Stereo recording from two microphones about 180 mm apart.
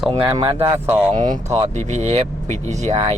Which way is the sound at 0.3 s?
15° right (ahead or behind).